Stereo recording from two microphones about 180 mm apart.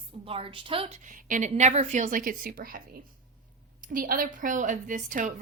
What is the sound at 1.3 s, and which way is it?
A woman's voice, 45° right (ahead or behind).